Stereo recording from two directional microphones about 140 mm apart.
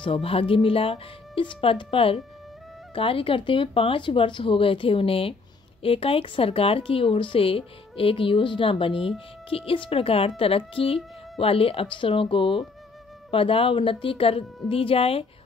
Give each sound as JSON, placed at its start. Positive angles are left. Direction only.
{"t": 0.0, "sound": "a woman's voice", "side_deg": 40}